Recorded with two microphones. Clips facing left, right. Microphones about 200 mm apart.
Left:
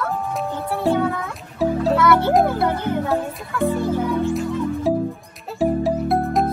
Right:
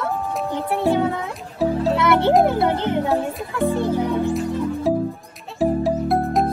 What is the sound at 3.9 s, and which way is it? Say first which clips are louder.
Music: even; 15° right (ahead or behind).